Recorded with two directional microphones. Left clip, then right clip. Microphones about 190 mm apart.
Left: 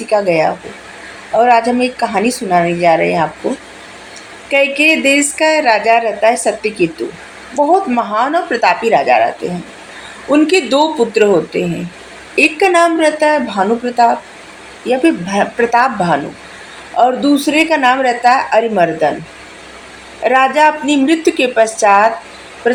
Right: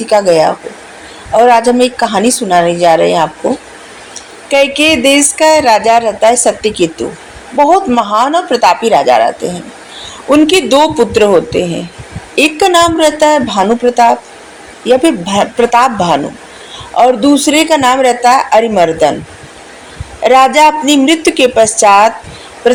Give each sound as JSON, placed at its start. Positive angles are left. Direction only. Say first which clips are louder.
{"t": 0.1, "sound": "speech", "louder": "right 5 dB", "side_deg": -35}
{"t": 4.7, "sound": "speech", "louder": "right 3 dB", "side_deg": -35}
{"t": 20.2, "sound": "speech", "louder": "right 4 dB", "side_deg": -35}